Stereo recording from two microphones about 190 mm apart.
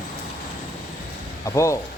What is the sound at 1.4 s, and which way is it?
Speech, 15° left (ahead or behind).